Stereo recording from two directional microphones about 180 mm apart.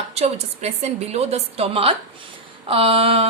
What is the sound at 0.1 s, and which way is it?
A woman's voice, 35° right (ahead or behind).